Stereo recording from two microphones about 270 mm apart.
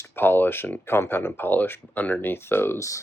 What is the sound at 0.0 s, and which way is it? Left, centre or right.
Speech, centre.